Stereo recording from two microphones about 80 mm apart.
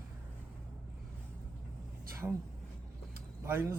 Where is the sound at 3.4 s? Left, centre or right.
Right.